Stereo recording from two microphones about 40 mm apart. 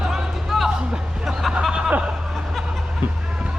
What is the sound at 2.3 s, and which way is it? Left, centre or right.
Snicker, centre.